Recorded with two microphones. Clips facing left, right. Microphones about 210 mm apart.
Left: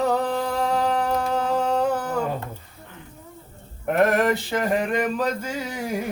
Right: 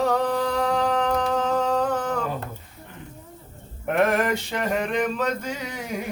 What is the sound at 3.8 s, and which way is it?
Male singing, centre (ahead or behind).